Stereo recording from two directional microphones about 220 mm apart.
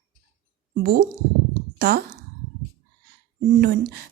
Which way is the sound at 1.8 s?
45° right (ahead or behind).